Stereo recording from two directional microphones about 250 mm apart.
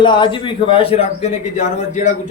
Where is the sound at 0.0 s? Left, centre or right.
Centre.